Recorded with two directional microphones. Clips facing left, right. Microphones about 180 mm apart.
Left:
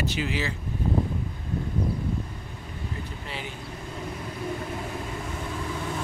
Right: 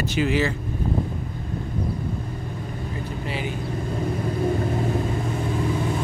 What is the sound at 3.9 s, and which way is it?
Vehicle, 40° right (ahead or behind).